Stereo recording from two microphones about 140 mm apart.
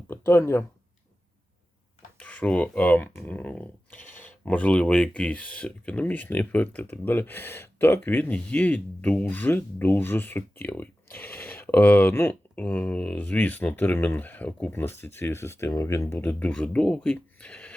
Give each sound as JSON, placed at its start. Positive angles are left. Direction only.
{"t": 0.1, "sound": "speech", "side_deg": 15}
{"t": 2.1, "sound": "speech", "side_deg": 10}